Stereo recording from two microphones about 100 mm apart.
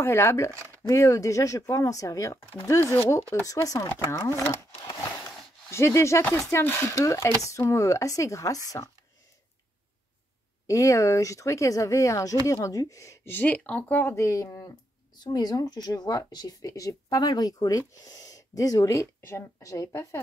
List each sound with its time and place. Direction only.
0.0 s speech: 25° left (ahead or behind)
5.7 s speech: 25° left (ahead or behind)
10.7 s speech: 30° left (ahead or behind)